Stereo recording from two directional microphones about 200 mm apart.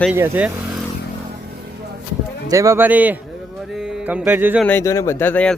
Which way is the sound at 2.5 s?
15° right (ahead or behind).